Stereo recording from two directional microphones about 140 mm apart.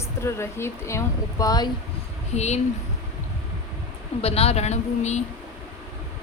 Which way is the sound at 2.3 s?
55° left (ahead or behind).